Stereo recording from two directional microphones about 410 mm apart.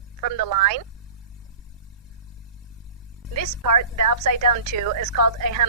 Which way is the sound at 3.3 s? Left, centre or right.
Right.